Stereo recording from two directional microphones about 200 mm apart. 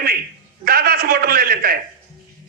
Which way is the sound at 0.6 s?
50° right (ahead or behind).